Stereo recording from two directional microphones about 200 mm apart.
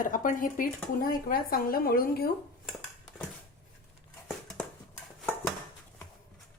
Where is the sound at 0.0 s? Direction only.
40° left (ahead or behind).